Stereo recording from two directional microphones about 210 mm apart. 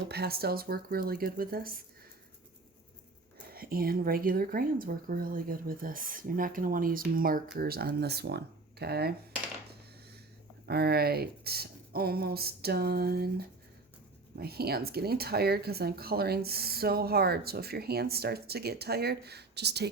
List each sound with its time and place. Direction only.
0.1 s speech: 50° right (ahead or behind)
3.5 s speech: 45° right (ahead or behind)
10.7 s speech: 50° right (ahead or behind)